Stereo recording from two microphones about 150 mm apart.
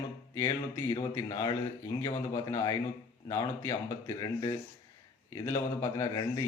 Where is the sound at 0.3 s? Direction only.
25° left (ahead or behind).